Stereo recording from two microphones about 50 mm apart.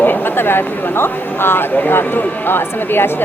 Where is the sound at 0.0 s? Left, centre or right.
Left.